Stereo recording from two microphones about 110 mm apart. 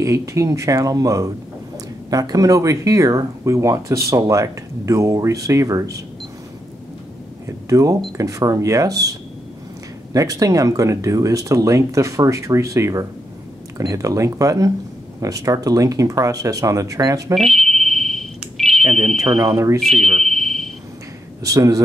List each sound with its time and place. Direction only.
0.0 s speech: 30° right (ahead or behind)
7.4 s speech: 30° right (ahead or behind)
10.1 s speech: 35° right (ahead or behind)
17.4 s a sound: 5° left (ahead or behind)
18.6 s smoke detector: 5° left (ahead or behind)
19.5 s speech: 30° right (ahead or behind)
19.8 s smoke detector: centre (ahead or behind)
21.4 s speech: 30° right (ahead or behind)